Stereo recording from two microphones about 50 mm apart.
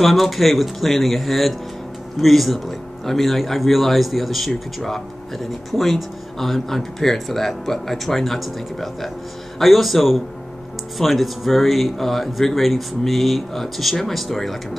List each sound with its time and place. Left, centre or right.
0.0 s speech: centre